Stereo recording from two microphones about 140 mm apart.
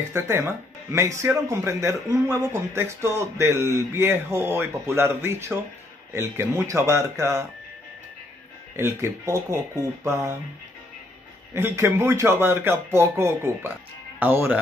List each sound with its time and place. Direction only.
0.1 s speech: 15° right (ahead or behind)
8.7 s speech: 20° right (ahead or behind)
11.5 s speech: 20° right (ahead or behind)